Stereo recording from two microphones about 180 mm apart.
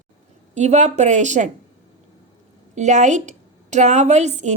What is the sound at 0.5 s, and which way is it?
Speech, 40° right (ahead or behind).